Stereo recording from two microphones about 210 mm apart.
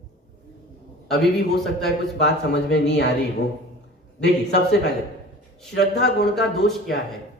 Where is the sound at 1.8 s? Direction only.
50° left (ahead or behind).